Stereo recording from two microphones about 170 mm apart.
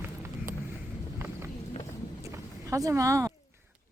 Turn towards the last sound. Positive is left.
turn(degrees=-20)  # may be behind; listen again after turning